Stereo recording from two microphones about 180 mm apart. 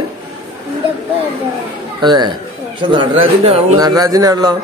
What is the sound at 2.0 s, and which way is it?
Speech, 25° right (ahead or behind).